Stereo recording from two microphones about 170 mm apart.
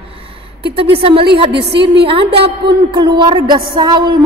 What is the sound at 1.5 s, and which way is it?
Speech, 80° right.